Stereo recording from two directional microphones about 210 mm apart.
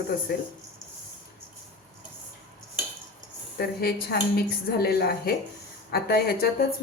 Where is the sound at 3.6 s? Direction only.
50° left (ahead or behind).